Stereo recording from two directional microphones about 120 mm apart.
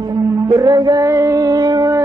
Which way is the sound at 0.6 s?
35° right (ahead or behind).